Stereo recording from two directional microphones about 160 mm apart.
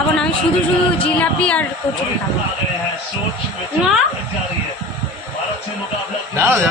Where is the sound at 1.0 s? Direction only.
10° left (ahead or behind).